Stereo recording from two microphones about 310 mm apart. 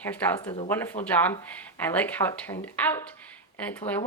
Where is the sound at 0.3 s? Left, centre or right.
Centre.